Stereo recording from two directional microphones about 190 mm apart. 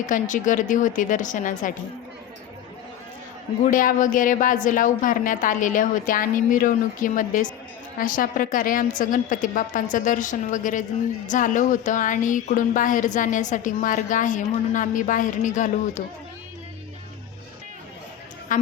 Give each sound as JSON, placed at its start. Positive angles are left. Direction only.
{"t": 0.0, "sound": "a woman's voice", "side_deg": 40}
{"t": 3.7, "sound": "speech", "side_deg": 45}
{"t": 18.5, "sound": "a woman's voice", "side_deg": 45}